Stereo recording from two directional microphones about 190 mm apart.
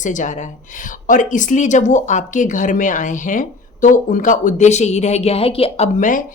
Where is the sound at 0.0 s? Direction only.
40° left (ahead or behind).